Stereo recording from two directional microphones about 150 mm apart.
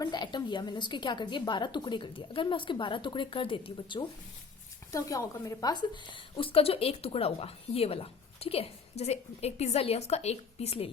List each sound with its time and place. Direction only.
0.0 s a woman's voice: 30° left (ahead or behind)
4.9 s a woman's voice: 25° left (ahead or behind); by 10.9 s 40° left (ahead or behind)